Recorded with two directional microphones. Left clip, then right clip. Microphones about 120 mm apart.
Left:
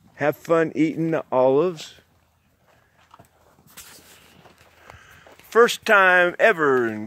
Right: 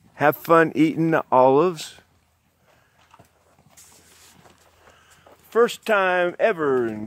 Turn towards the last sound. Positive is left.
turn(degrees=5)  # may be behind; listen again after turning